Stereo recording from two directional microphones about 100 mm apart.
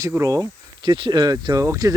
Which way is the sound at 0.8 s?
50° right (ahead or behind).